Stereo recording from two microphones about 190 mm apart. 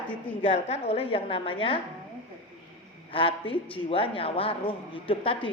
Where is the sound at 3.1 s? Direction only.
30° left (ahead or behind).